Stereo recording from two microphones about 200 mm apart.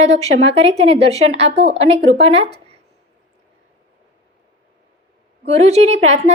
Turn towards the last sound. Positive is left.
turn(degrees=-35)  # may be behind; listen again after turning